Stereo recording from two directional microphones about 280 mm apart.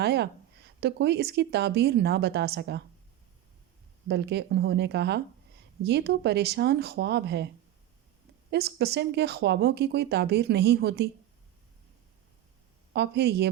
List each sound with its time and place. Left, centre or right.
0.0 s speech: right
4.1 s speech: right
12.9 s speech: right